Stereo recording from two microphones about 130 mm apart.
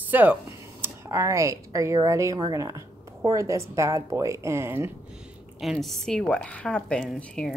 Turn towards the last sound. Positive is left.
turn(degrees=5)  # may be behind; listen again after turning